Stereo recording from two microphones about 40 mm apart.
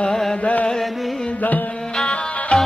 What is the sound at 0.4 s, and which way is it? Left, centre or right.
Music, left.